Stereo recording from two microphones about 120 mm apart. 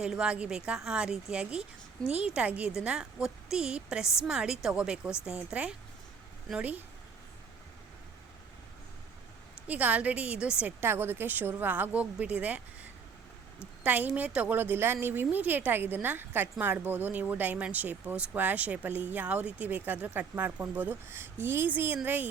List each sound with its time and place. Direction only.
0.0 s a woman's voice: 5° right (ahead or behind)
9.6 s a woman's voice: 10° right (ahead or behind)